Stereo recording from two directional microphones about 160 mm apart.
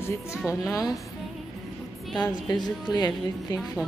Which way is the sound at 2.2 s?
25° left (ahead or behind).